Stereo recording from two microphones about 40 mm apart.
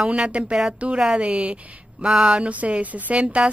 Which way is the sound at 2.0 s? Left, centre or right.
Right.